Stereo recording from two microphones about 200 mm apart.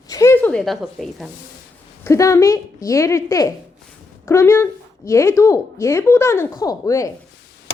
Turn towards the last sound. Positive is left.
turn(degrees=15)  # may be behind; listen again after turning